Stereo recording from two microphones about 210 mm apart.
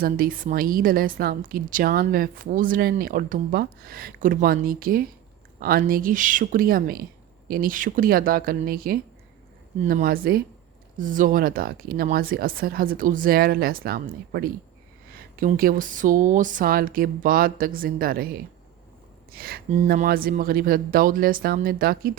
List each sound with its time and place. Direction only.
0.0 s a woman's voice: 40° right (ahead or behind)